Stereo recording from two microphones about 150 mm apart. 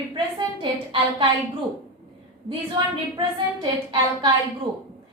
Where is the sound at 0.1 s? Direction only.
30° right (ahead or behind).